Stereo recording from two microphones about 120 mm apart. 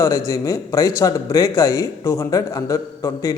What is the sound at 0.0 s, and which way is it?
Speech, 25° left (ahead or behind).